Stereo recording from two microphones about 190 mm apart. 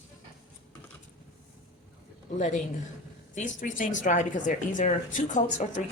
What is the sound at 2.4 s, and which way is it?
A woman's voice, 40° left (ahead or behind).